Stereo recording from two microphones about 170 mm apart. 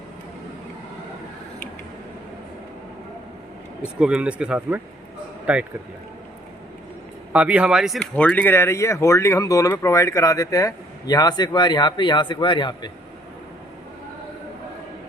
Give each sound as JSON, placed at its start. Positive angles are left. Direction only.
{"t": 4.0, "sound": "speech", "side_deg": -5}
{"t": 7.3, "sound": "speech", "side_deg": -10}